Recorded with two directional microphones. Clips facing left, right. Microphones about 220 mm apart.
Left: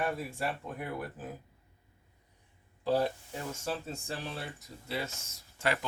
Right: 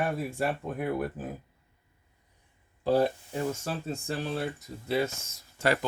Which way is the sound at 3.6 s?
50° right (ahead or behind).